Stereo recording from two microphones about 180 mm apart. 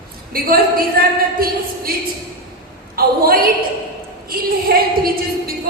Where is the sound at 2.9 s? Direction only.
55° right (ahead or behind).